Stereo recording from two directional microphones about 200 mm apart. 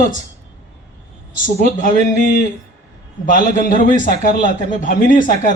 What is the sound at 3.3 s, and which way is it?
Speech, 45° left (ahead or behind).